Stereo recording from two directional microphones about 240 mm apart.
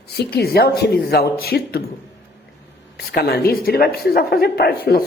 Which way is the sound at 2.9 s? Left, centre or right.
Left.